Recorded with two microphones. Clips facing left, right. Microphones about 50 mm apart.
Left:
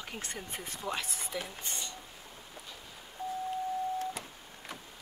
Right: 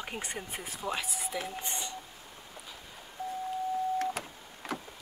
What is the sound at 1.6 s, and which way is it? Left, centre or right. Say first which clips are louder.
Speech: right 3 dB; right.